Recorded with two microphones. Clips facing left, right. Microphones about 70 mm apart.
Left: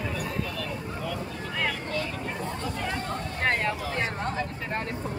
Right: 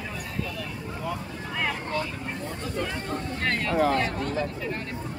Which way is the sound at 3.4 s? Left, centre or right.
Left.